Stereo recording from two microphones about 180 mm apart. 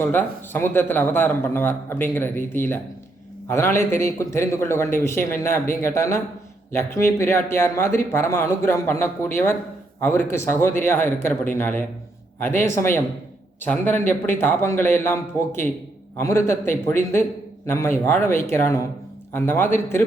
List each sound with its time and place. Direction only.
0.0 s a man's voice: 10° left (ahead or behind)